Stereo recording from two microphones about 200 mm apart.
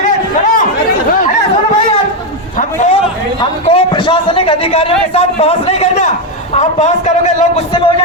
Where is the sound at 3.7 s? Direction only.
25° left (ahead or behind).